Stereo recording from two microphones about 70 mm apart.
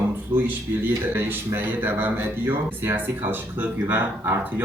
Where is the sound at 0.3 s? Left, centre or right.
Right.